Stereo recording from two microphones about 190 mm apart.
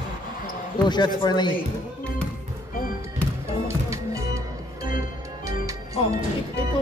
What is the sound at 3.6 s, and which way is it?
Music, 15° right (ahead or behind).